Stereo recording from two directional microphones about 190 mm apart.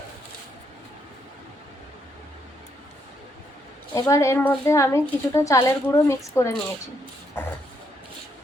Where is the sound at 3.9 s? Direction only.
15° left (ahead or behind).